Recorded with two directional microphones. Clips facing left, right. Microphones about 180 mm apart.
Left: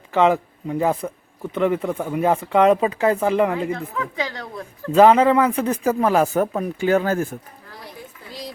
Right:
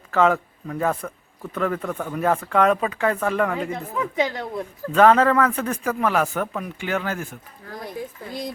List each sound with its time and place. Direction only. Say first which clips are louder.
0.1 s speech: left 2 dB; 20° left (ahead or behind)
3.7 s speech: left 1 dB; 20° right (ahead or behind)
4.9 s speech: left 3 dB; 25° left (ahead or behind)